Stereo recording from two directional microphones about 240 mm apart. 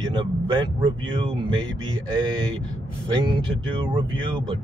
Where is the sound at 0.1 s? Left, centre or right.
Centre.